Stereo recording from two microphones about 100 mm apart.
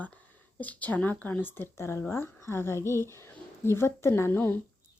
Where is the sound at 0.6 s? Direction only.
15° left (ahead or behind).